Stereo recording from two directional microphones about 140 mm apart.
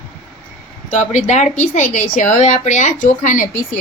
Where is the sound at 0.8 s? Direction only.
60° left (ahead or behind).